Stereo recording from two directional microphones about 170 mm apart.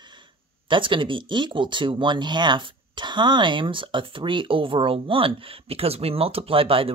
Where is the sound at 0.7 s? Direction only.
30° right (ahead or behind).